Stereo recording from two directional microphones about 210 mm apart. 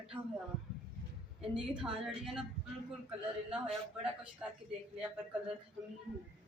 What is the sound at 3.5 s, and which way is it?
Speech, 5° right (ahead or behind).